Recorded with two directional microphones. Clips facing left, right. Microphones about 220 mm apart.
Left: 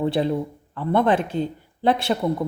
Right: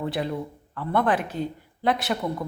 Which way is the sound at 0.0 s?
30° left (ahead or behind).